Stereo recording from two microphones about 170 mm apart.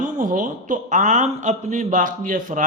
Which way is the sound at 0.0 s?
50° right (ahead or behind).